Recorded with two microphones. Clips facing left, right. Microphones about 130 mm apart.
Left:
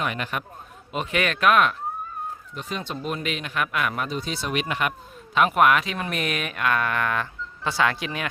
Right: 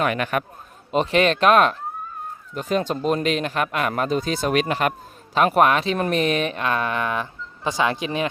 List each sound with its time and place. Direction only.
0.0 s a man's voice: 60° right (ahead or behind)
0.9 s a man's voice: 30° right (ahead or behind)
2.6 s a man's voice: 45° right (ahead or behind); by 8.3 s 25° right (ahead or behind)